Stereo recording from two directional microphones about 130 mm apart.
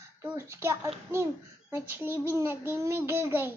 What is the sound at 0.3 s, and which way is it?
A child's voice, 20° right (ahead or behind).